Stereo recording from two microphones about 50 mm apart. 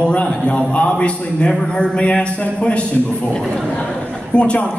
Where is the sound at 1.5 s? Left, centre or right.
Centre.